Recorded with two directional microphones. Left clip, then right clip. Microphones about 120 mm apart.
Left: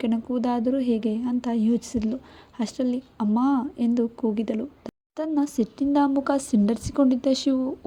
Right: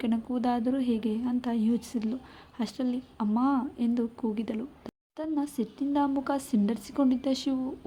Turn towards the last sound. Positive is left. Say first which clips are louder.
# left 7 dB
turn(degrees=40)  # may be behind; listen again after turning